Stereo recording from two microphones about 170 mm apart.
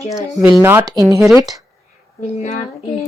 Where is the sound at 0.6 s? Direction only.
15° right (ahead or behind).